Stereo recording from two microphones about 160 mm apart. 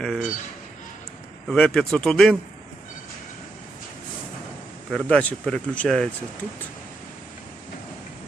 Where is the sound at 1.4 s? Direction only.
5° left (ahead or behind).